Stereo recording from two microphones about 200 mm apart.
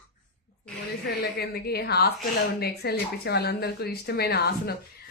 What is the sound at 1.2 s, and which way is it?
A woman's voice, 55° left (ahead or behind).